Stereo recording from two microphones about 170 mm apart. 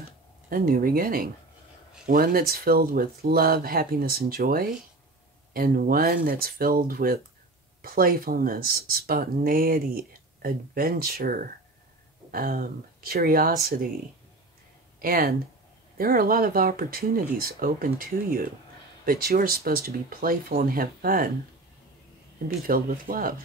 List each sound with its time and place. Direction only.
0.5 s speech: 60° right (ahead or behind)
15.0 s speech: 60° right (ahead or behind)
22.7 s speech: 55° right (ahead or behind)